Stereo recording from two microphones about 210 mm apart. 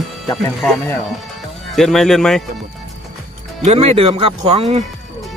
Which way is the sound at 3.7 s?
30° right (ahead or behind).